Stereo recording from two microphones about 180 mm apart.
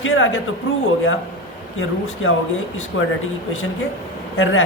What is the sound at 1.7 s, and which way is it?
Speech, 90° left.